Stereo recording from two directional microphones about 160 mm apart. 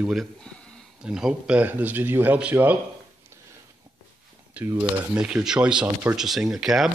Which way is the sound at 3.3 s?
15° right (ahead or behind).